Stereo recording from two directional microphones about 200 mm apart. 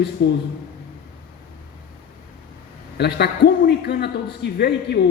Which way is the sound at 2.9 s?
55° left (ahead or behind).